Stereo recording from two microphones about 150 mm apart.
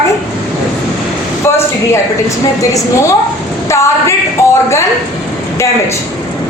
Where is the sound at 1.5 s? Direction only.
15° left (ahead or behind).